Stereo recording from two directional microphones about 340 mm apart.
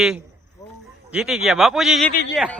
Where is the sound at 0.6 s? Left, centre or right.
Centre.